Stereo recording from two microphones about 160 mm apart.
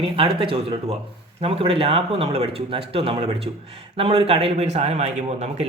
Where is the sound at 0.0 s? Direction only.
35° right (ahead or behind).